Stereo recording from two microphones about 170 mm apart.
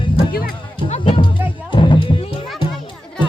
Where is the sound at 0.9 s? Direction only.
35° left (ahead or behind).